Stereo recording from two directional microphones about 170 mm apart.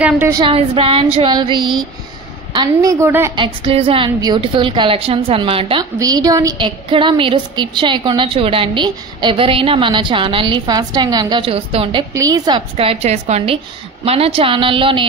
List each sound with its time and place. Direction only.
0.3 s a woman's voice: 30° right (ahead or behind)
3.3 s a woman's voice: 35° right (ahead or behind)
5.9 s a woman's voice: 20° right (ahead or behind)
12.1 s a woman's voice: 20° right (ahead or behind)